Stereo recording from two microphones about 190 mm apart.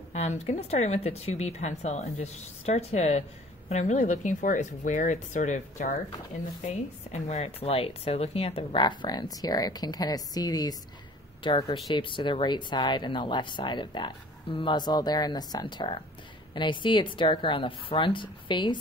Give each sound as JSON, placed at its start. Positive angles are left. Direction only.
{"t": 0.1, "sound": "speech", "side_deg": 35}
{"t": 7.1, "sound": "speech", "side_deg": 35}